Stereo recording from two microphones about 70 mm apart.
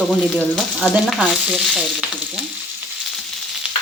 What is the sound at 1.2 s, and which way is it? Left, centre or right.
Frying, centre.